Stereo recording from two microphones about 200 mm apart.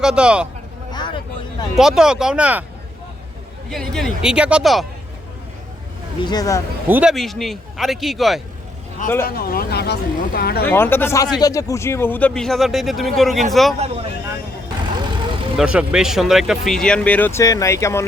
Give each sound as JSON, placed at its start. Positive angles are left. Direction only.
{"t": 0.0, "sound": "speech", "side_deg": -5}
{"t": 0.9, "sound": "vehicle", "side_deg": 20}
{"t": 1.7, "sound": "speech", "side_deg": -5}
{"t": 3.7, "sound": "speech", "side_deg": 0}
{"t": 6.2, "sound": "speech", "side_deg": 20}
{"t": 6.8, "sound": "speech", "side_deg": -5}
{"t": 9.2, "sound": "speech", "side_deg": 50}
{"t": 10.7, "sound": "speech", "side_deg": 10}
{"t": 13.7, "sound": "speech", "side_deg": -30}
{"t": 15.5, "sound": "speech", "side_deg": -5}